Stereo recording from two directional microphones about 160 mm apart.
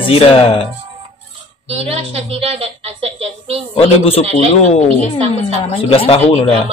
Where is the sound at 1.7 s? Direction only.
40° right (ahead or behind).